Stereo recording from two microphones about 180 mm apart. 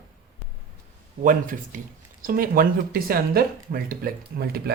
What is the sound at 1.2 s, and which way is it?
Speech, 45° right (ahead or behind).